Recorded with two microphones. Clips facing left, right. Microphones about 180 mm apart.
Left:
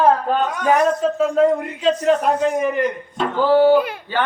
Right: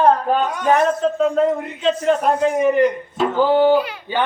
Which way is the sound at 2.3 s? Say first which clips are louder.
Right 3 dB; 5° right (ahead or behind).